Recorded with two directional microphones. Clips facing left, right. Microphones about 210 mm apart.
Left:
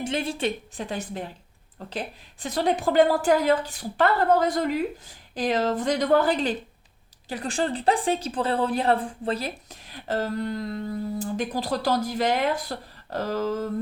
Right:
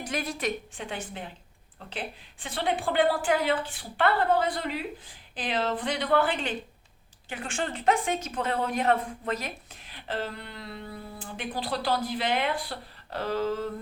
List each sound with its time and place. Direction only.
0.0 s a woman's voice: 25° left (ahead or behind)
9.9 s speech: 45° left (ahead or behind)